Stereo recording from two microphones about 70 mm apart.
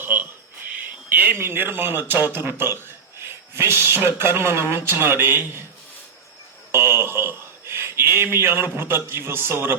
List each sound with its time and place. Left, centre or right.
0.0 s a sound: right
0.8 s speech: right
6.7 s speech: right